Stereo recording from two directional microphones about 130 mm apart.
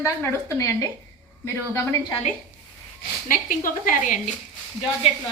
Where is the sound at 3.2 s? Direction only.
90° left.